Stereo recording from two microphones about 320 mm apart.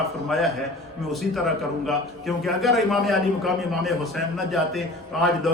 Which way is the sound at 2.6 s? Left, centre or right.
Centre.